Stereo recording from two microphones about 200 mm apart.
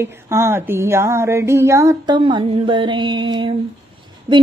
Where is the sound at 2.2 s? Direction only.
25° right (ahead or behind).